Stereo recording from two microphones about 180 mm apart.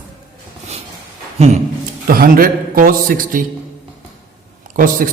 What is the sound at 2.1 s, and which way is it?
A man's voice, 55° right (ahead or behind).